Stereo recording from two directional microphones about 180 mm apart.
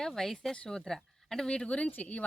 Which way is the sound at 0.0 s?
Centre (ahead or behind).